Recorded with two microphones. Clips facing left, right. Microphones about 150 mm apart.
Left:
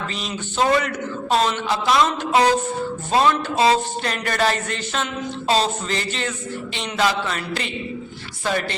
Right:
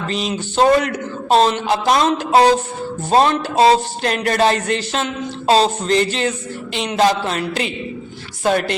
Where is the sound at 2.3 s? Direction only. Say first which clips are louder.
Right 5 dB; 35° right (ahead or behind).